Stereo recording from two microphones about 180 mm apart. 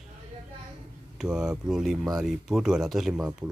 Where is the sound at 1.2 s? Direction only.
5° right (ahead or behind).